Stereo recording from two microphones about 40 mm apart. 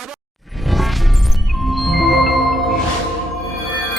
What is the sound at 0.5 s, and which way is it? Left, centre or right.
Music, centre.